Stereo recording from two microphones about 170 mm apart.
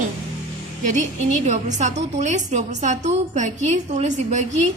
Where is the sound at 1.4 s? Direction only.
45° right (ahead or behind).